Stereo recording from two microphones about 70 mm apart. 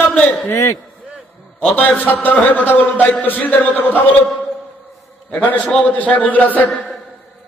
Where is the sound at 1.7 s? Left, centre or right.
Left.